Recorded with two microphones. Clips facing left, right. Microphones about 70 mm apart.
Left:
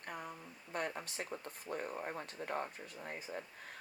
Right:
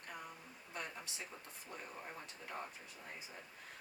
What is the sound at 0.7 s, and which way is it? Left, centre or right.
Speech, left.